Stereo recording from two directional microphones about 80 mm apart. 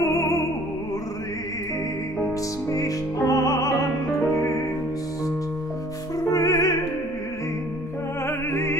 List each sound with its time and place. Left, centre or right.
0.0 s opera: left
2.7 s music: left
6.3 s music: left
8.3 s opera: left